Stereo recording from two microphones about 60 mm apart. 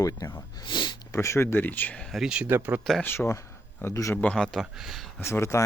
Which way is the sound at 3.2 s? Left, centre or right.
Left.